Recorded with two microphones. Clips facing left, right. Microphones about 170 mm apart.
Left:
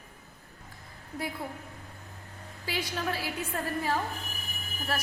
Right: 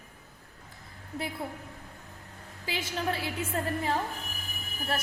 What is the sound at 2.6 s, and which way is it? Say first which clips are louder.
A woman's voice: right 1 dB; 20° right (ahead or behind).